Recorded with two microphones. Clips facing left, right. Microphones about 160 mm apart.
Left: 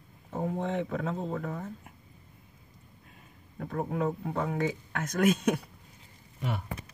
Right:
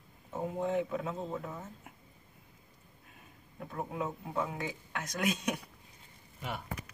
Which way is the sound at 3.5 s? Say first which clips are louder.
Left 6 dB; 55° left (ahead or behind).